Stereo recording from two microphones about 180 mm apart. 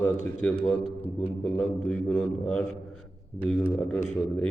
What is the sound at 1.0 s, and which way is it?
Speech, 35° left (ahead or behind).